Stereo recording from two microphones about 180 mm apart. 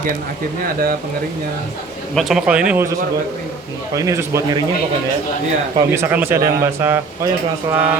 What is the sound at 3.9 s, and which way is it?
Speech, 15° right (ahead or behind).